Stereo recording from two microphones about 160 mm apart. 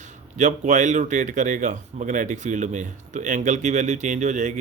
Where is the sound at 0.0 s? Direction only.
50° right (ahead or behind).